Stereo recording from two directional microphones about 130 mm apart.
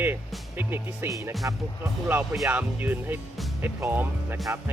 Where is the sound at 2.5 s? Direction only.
15° right (ahead or behind).